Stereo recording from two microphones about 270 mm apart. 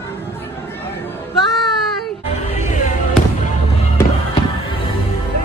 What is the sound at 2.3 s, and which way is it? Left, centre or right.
Music, left.